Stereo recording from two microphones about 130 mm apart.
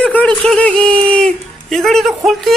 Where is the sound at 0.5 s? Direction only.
5° left (ahead or behind).